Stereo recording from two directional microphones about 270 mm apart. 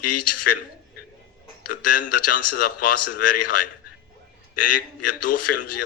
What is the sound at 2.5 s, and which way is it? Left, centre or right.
Speech, left.